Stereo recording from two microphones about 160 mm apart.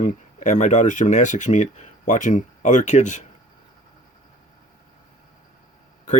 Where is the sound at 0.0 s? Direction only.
50° left (ahead or behind).